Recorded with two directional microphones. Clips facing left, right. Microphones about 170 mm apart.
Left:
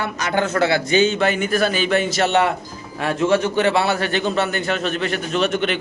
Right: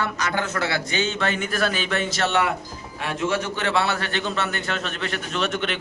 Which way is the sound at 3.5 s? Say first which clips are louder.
Left 6 dB; 10° left (ahead or behind).